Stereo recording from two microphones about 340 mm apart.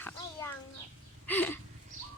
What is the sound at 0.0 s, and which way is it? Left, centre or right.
Horse, centre.